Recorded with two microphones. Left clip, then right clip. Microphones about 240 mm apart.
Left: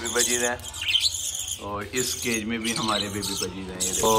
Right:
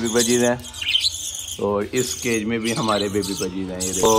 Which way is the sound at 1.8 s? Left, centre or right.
Centre.